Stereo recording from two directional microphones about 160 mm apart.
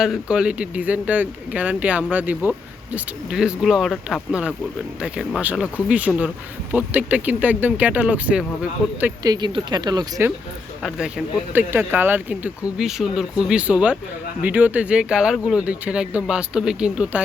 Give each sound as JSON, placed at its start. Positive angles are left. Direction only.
{"t": 0.0, "sound": "speech", "side_deg": -5}
{"t": 9.2, "sound": "speech", "side_deg": -25}
{"t": 10.8, "sound": "speech", "side_deg": -5}